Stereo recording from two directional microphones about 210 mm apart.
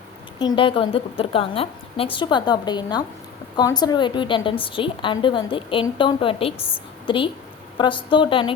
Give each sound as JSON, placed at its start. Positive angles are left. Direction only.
{"t": 0.3, "sound": "a woman's voice", "side_deg": 20}